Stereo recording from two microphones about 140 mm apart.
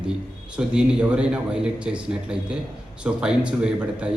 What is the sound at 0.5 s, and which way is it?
A man's voice, 5° right (ahead or behind).